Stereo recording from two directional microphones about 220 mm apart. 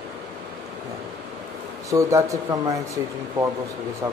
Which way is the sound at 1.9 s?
15° right (ahead or behind).